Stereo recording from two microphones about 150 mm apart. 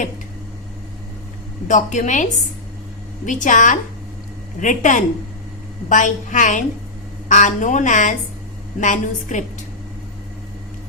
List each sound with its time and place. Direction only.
1.6 s a woman's voice: 55° left (ahead or behind)
3.2 s a woman's voice: 55° left (ahead or behind)